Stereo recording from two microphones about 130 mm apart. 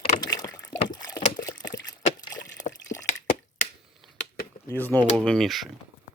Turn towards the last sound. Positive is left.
turn(degrees=0)  # may be behind; listen again after turning